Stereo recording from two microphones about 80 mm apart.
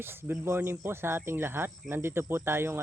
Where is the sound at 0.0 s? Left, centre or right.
Right.